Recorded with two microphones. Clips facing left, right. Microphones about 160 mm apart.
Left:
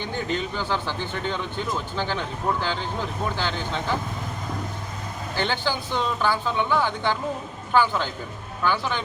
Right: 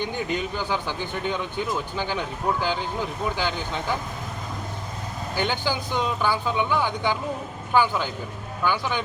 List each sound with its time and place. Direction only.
0.0 s speech: 15° right (ahead or behind)
5.4 s speech: 10° right (ahead or behind)